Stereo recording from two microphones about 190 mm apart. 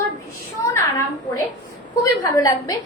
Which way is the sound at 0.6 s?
15° left (ahead or behind).